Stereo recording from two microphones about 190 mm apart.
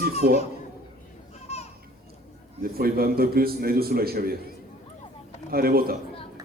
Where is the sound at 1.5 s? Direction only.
35° left (ahead or behind).